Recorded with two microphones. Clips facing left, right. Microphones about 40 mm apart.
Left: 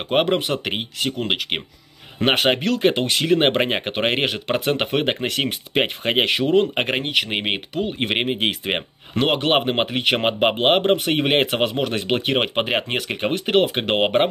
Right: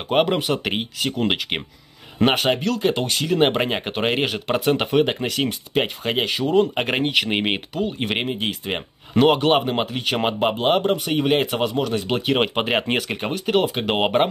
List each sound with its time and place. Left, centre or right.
0.1 s speech: centre
2.3 s speech: left
6.9 s speech: centre
8.3 s speech: left
9.2 s speech: centre
9.6 s speech: left
12.6 s speech: centre
13.3 s speech: left
13.8 s speech: centre